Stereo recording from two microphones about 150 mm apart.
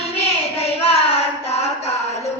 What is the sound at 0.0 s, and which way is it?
Child singing, 40° left (ahead or behind).